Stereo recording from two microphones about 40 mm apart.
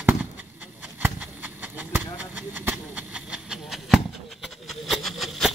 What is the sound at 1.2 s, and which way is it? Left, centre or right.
Horse, right.